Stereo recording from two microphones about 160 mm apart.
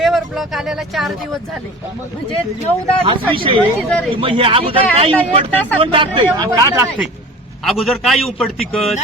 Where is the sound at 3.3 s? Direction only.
35° right (ahead or behind).